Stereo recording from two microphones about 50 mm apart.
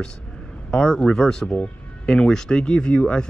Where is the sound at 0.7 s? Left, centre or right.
Centre.